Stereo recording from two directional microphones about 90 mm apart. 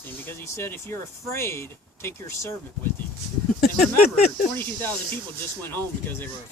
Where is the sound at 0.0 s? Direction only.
25° left (ahead or behind).